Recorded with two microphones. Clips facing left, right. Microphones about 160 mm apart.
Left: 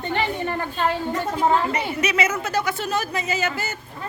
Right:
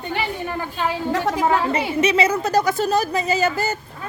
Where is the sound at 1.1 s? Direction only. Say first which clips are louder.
Right 4 dB; 90° right.